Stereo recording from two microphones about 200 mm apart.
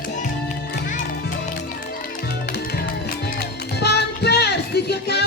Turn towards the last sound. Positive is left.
turn(degrees=55)  # may be behind; listen again after turning